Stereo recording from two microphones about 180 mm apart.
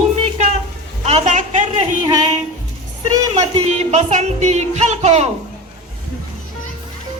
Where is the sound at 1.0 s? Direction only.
40° right (ahead or behind).